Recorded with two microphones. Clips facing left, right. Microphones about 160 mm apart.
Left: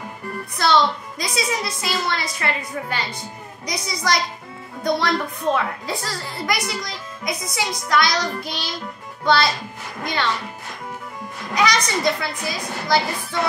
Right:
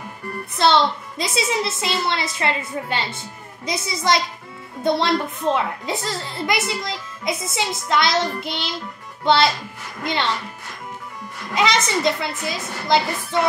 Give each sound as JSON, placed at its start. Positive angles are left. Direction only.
{"t": 0.6, "sound": "a woman's voice", "side_deg": -25}
{"t": 11.5, "sound": "a woman's voice", "side_deg": -25}